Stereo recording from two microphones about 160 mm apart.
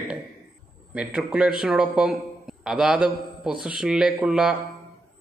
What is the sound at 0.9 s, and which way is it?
A man's voice, 5° right (ahead or behind).